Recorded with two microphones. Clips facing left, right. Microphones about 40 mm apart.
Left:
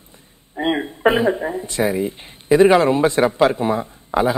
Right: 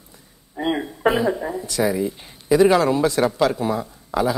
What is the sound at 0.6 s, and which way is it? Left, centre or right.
Speech, left.